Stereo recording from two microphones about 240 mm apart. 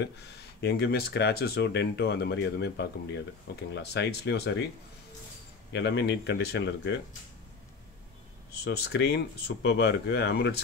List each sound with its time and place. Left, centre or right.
0.0 s speech: left
5.7 s speech: left
8.6 s speech: left